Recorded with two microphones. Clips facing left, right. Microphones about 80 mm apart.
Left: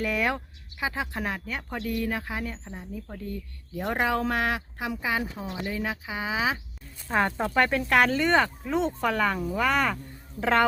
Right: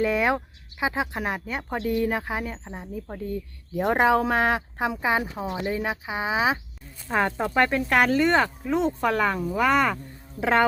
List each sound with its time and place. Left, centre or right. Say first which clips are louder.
0.0 s speech: right 5 dB; right
7.1 s speech: right 1 dB; centre